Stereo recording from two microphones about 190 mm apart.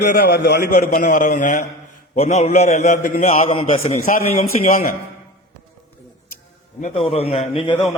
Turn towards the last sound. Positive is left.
turn(degrees=30)  # may be behind; listen again after turning